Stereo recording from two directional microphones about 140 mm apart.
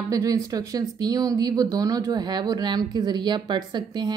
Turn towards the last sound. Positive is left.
turn(degrees=-30)  # may be behind; listen again after turning